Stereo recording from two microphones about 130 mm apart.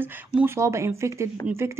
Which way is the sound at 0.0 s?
10° right (ahead or behind).